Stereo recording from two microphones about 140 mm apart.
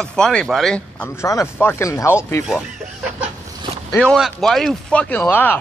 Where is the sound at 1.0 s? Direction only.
20° left (ahead or behind).